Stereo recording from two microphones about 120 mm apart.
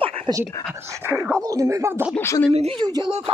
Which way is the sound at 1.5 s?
25° right (ahead or behind).